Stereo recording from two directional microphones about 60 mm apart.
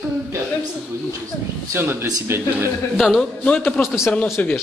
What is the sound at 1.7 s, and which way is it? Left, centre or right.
Speech, right.